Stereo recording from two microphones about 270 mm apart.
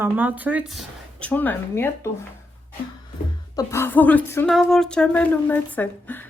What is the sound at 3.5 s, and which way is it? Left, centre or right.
A woman's voice, centre.